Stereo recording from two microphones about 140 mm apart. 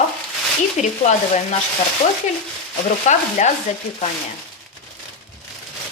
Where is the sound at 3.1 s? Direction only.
55° left (ahead or behind).